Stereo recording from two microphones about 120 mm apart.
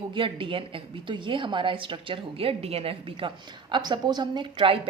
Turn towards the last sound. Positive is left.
turn(degrees=-45)  # may be behind; listen again after turning